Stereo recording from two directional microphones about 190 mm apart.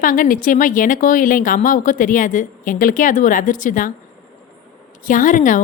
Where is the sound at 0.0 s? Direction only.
45° left (ahead or behind).